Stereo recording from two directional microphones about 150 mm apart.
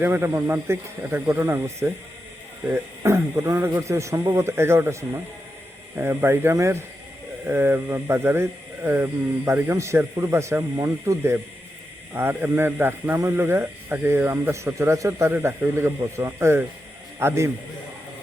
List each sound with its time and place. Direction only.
0.0 s speech: 15° right (ahead or behind)